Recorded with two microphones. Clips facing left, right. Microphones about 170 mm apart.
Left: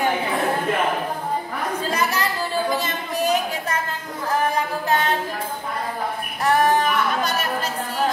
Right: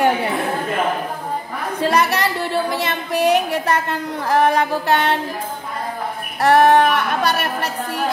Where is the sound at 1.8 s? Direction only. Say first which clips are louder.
Right 8 dB; 70° right (ahead or behind).